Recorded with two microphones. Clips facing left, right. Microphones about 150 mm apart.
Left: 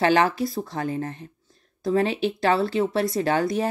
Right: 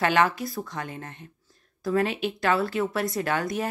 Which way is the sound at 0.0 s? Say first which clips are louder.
Left 3 dB; 30° left (ahead or behind).